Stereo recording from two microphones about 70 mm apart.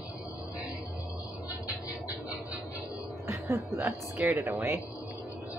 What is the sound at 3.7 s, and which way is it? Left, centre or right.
Speech, right.